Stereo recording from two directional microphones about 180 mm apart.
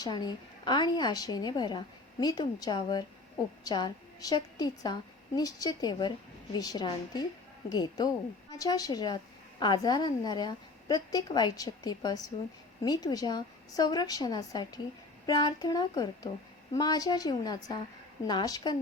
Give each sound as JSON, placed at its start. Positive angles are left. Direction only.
{"t": 0.0, "sound": "a woman's voice", "side_deg": 20}